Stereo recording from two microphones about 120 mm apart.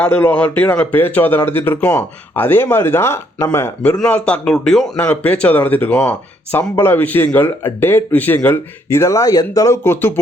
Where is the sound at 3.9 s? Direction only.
10° left (ahead or behind).